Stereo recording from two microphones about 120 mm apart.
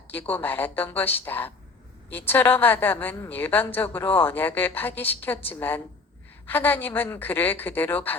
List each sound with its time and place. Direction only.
0.1 s speech: 15° left (ahead or behind)